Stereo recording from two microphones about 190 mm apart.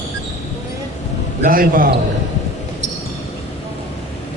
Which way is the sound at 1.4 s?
50° right (ahead or behind).